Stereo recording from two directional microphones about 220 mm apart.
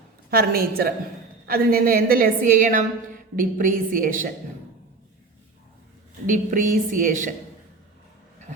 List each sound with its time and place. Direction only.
0.3 s a woman's voice: 40° right (ahead or behind)
6.2 s a woman's voice: 35° right (ahead or behind)